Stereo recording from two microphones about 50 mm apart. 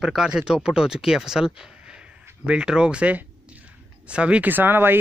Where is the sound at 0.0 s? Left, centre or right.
Centre.